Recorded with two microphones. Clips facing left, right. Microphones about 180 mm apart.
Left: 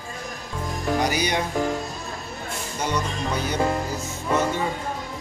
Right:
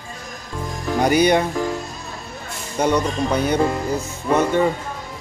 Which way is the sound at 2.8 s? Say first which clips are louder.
Right 9 dB; 60° right (ahead or behind).